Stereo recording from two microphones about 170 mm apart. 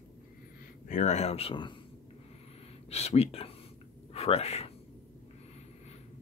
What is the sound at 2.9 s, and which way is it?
Speech, 40° left (ahead or behind).